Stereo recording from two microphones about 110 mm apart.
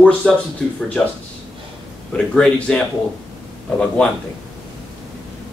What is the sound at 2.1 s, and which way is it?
Speech, 10° left (ahead or behind).